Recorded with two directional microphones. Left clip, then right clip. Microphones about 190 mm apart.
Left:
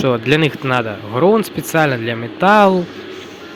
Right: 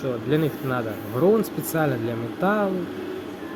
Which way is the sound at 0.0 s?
30° left (ahead or behind).